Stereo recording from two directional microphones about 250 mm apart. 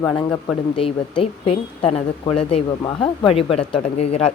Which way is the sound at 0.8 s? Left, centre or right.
Left.